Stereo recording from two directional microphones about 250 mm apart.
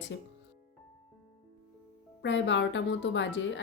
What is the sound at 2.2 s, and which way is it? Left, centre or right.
Speech, left.